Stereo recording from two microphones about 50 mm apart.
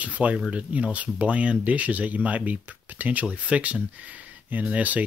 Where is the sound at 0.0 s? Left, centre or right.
Right.